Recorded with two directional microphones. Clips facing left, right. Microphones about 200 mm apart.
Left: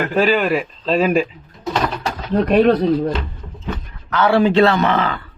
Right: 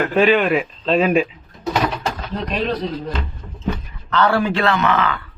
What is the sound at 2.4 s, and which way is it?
Speech, 55° left (ahead or behind).